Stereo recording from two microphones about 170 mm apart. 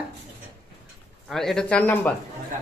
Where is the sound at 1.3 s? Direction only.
Centre (ahead or behind).